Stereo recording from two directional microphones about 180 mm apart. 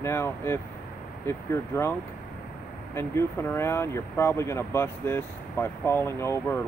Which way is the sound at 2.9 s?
15° left (ahead or behind).